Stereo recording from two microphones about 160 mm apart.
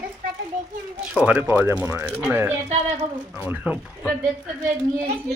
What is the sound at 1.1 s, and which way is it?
Speech, 10° right (ahead or behind).